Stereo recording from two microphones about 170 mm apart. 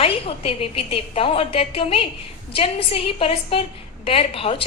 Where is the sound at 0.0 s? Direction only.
35° left (ahead or behind).